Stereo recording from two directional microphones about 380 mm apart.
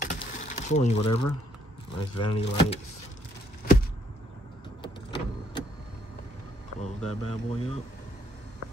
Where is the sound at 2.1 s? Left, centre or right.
Centre.